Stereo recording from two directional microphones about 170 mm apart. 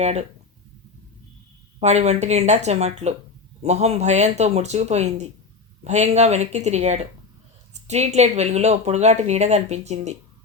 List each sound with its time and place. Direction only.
0.0 s speech: 40° right (ahead or behind)
1.8 s speech: 40° right (ahead or behind)